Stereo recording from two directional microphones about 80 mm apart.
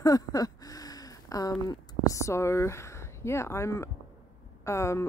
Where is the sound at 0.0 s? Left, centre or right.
Left.